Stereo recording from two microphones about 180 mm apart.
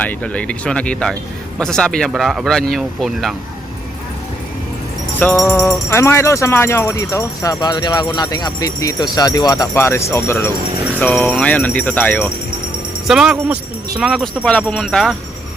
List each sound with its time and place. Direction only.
0.0 s music: 10° left (ahead or behind)
1.5 s speech: 5° left (ahead or behind)
5.2 s music: 10° left (ahead or behind)
13.1 s speech: 5° right (ahead or behind)